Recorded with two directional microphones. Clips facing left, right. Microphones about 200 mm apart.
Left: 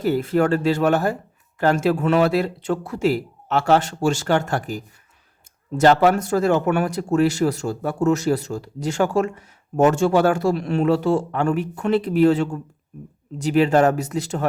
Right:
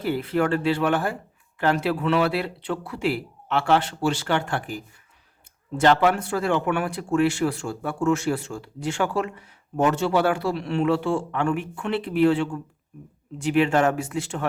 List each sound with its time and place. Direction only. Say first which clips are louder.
0.0 s speech: left 4 dB; 45° left (ahead or behind)